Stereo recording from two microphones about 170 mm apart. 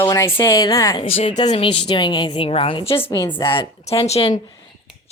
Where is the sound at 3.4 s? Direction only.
30° left (ahead or behind).